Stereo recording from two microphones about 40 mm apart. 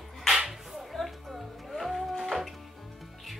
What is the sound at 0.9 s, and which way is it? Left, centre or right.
Music, centre.